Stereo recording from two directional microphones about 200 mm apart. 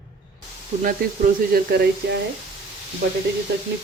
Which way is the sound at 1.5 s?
50° right (ahead or behind).